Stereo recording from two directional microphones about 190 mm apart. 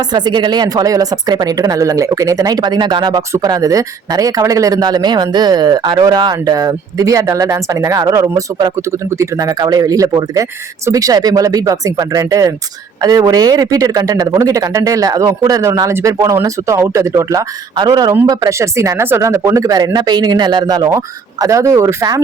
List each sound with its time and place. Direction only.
0.1 s speech: 25° right (ahead or behind)